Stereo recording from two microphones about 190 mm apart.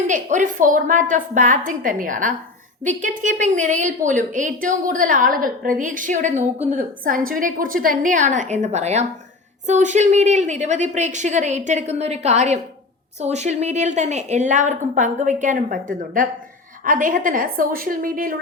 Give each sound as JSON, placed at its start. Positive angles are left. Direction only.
{"t": 0.1, "sound": "a woman's voice", "side_deg": -40}